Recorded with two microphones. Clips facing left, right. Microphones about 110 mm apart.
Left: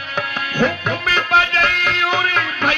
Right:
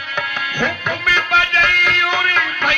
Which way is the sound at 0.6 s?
35° left (ahead or behind).